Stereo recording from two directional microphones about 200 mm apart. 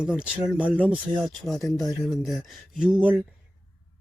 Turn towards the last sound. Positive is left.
turn(degrees=-5)  # may be behind; listen again after turning